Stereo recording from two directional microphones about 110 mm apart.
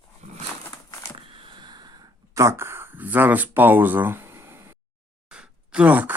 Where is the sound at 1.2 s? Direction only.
45° right (ahead or behind).